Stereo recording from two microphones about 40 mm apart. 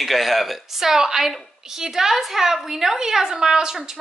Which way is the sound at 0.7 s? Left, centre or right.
Centre.